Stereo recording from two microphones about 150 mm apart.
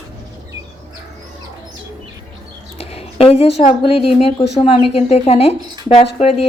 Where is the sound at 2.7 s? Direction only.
45° left (ahead or behind).